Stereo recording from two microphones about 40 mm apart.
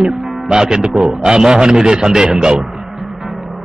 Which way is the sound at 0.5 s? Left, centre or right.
Centre.